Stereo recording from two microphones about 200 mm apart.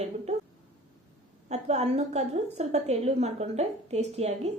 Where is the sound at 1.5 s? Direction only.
35° right (ahead or behind).